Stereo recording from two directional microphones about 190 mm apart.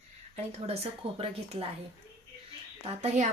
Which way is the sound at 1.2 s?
30° right (ahead or behind).